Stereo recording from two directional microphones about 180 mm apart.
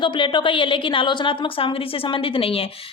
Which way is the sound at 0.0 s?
25° left (ahead or behind).